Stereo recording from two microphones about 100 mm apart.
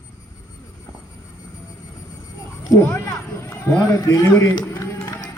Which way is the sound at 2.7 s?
25° left (ahead or behind).